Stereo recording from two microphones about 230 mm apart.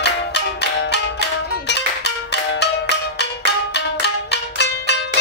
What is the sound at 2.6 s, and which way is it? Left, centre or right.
Music, left.